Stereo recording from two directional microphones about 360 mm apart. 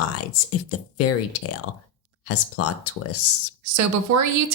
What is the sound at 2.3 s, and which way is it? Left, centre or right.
Speech, left.